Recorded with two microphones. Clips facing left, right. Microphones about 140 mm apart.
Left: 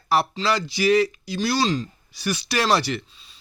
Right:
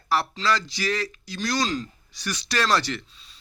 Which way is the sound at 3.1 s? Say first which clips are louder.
Left 1 dB; centre (ahead or behind).